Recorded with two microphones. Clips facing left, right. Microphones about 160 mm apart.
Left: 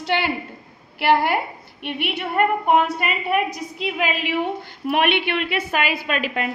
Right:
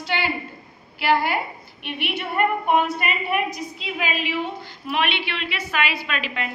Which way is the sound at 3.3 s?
55° left (ahead or behind).